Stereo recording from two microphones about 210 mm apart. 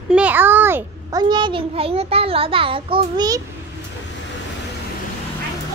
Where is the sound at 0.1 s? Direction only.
5° right (ahead or behind).